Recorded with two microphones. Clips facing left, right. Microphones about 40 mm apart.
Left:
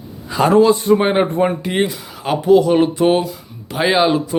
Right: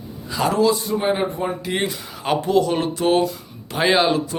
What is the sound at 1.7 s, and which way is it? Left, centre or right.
Speech, centre.